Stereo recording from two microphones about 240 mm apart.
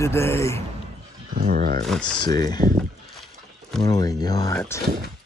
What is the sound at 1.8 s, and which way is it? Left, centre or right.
Speech, centre.